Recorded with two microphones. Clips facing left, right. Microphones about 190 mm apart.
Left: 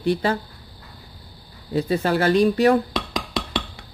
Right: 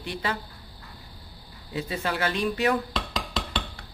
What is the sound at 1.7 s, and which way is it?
Speech, 40° left (ahead or behind).